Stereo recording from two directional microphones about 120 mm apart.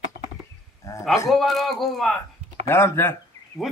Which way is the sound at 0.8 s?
25° left (ahead or behind).